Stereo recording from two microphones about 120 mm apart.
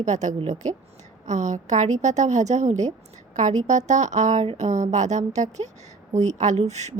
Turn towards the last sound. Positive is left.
turn(degrees=-70)  # may be behind; listen again after turning